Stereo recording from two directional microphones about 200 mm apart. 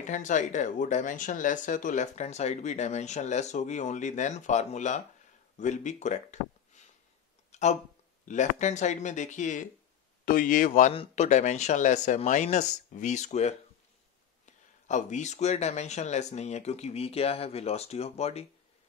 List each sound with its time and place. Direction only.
0.0 s speech: 40° left (ahead or behind)
6.8 s a sound: 35° left (ahead or behind)
8.3 s speech: 40° left (ahead or behind)